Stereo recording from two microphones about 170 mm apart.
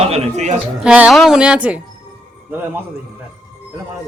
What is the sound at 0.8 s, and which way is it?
Speech, 5° right (ahead or behind).